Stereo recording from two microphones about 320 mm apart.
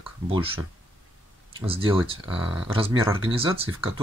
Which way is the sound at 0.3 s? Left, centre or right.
Centre.